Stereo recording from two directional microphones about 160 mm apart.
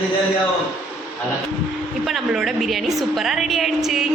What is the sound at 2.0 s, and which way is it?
A woman's voice, centre (ahead or behind).